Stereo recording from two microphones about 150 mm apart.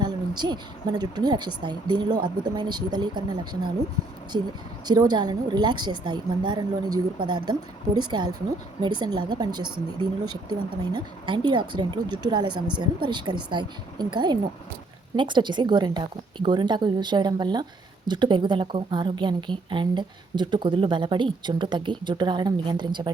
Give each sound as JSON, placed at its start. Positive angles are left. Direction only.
{"t": 0.0, "sound": "a woman's voice", "side_deg": -30}